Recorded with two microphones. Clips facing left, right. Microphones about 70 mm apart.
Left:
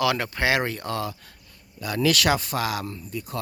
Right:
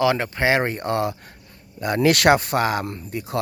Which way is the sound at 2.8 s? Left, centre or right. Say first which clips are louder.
Right 4 dB; right.